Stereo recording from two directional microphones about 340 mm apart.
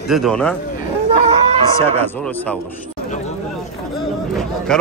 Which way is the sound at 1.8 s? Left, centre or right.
Centre.